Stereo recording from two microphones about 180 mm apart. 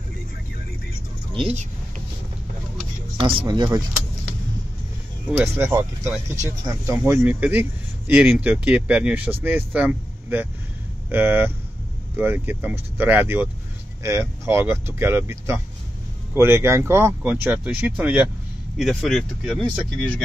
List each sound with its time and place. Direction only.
1.3 s speech: 35° right (ahead or behind)
3.2 s speech: 30° right (ahead or behind)
5.6 s speech: 15° right (ahead or behind)